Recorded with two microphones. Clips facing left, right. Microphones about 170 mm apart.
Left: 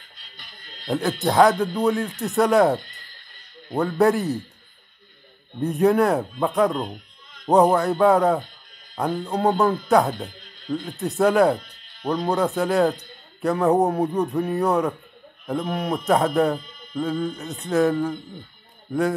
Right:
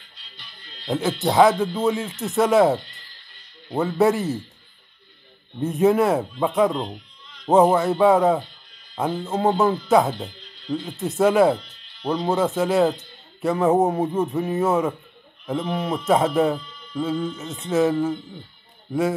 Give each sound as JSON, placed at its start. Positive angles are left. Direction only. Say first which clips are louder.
{"t": 0.2, "sound": "music", "louder": "even", "side_deg": 45}
{"t": 0.8, "sound": "speech", "louder": "even", "side_deg": 0}
{"t": 5.6, "sound": "speech", "louder": "even", "side_deg": 0}